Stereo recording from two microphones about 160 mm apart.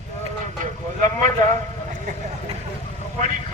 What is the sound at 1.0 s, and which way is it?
Speech, 55° right (ahead or behind).